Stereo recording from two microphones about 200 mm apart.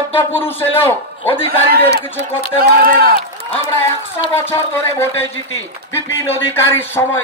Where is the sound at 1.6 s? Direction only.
50° right (ahead or behind).